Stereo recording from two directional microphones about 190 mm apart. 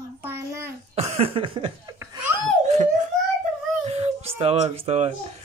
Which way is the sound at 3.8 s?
35° right (ahead or behind).